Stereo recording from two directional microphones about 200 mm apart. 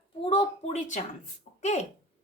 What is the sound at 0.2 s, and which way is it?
A woman's voice, 30° left (ahead or behind).